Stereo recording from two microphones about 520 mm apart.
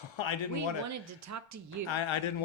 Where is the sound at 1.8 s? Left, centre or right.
Left.